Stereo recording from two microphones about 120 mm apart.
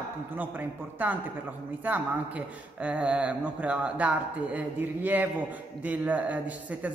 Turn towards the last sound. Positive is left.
turn(degrees=-10)  # may be behind; listen again after turning